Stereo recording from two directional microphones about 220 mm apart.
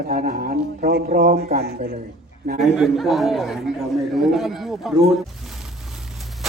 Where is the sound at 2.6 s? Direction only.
Centre (ahead or behind).